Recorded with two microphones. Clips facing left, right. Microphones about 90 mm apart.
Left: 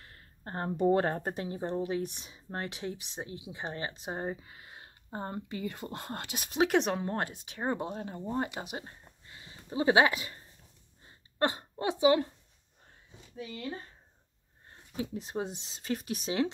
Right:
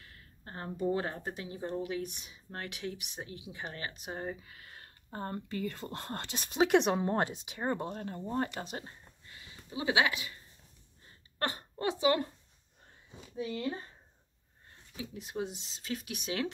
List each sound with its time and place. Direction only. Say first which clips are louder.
0.0 s speech: left 5 dB; 40° left (ahead or behind); by 7.0 s centre (ahead or behind)
7.0 s speech: right 3 dB; 20° right (ahead or behind)
7.6 s speech: left 1 dB; 10° left (ahead or behind)
9.3 s a sound: left 4 dB; 30° left (ahead or behind)
11.1 s a sound: left 6 dB; 20° left (ahead or behind)
15.0 s speech: left 3 dB; 35° left (ahead or behind)